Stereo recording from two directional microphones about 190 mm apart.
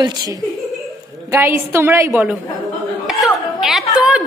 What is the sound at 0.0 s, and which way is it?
A woman's voice, 20° right (ahead or behind).